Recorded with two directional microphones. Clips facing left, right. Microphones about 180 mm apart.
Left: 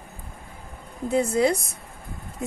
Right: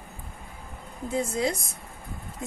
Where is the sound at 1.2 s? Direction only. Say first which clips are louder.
Left 6 dB; 60° left (ahead or behind).